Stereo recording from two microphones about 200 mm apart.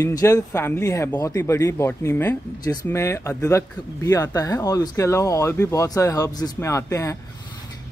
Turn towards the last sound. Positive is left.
turn(degrees=15)  # may be behind; listen again after turning